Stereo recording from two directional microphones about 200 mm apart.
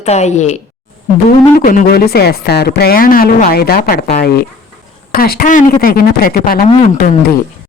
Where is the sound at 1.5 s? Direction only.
40° left (ahead or behind).